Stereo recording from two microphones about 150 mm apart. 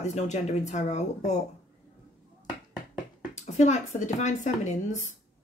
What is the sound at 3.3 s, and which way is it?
Speech, 50° left (ahead or behind).